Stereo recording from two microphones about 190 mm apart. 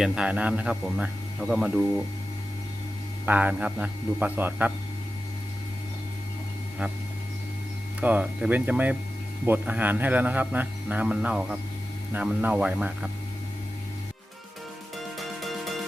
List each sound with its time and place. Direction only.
0.0 s speech: 5° right (ahead or behind)
3.2 s a man's voice: 10° right (ahead or behind)
8.0 s a man's voice: 10° right (ahead or behind)
14.9 s music: centre (ahead or behind)